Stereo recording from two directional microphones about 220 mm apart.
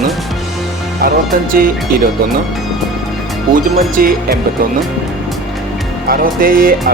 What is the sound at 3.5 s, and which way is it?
Speech, 40° right (ahead or behind).